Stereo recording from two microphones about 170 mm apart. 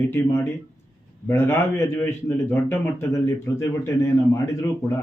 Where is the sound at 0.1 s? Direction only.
15° left (ahead or behind).